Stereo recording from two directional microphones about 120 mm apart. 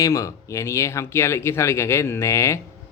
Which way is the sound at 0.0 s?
25° left (ahead or behind).